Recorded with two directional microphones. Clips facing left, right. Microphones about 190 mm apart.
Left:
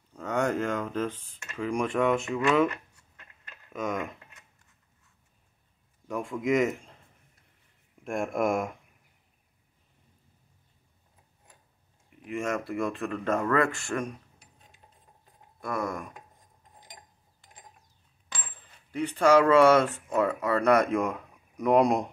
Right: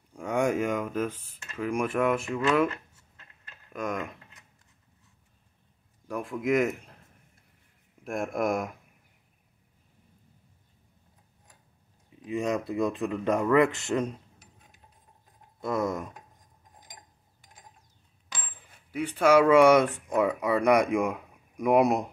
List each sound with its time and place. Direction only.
0.1 s speech: 10° right (ahead or behind)
3.7 s speech: centre (ahead or behind)
6.0 s a man's voice: centre (ahead or behind)
8.0 s speech: centre (ahead or behind)
12.2 s speech: 20° right (ahead or behind)
15.6 s speech: 20° right (ahead or behind)
18.3 s coin: 5° right (ahead or behind)